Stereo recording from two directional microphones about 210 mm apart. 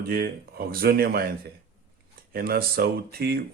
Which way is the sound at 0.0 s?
50° right (ahead or behind).